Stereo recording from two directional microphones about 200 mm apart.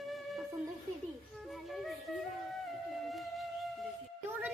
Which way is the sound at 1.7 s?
Centre (ahead or behind).